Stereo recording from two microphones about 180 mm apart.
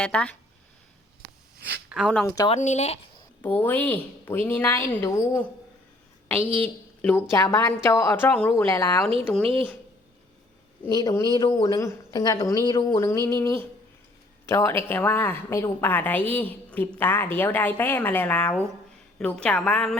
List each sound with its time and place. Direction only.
0.0 s a woman's voice: 5° left (ahead or behind)
1.5 s a sound: 65° right (ahead or behind)
1.9 s speech: centre (ahead or behind)
2.2 s speech: 20° left (ahead or behind)
2.5 s speech: 40° left (ahead or behind)
3.4 s a woman's voice: 10° left (ahead or behind)
7.0 s a woman's voice: 10° left (ahead or behind)
9.2 s speech: 5° left (ahead or behind)
10.8 s a woman's voice: 20° left (ahead or behind); by 20.0 s 5° left (ahead or behind)